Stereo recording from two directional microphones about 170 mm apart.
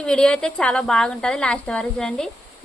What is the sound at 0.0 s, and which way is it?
A woman's voice, 5° left (ahead or behind).